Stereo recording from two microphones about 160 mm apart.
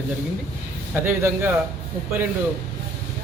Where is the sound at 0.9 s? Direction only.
15° right (ahead or behind).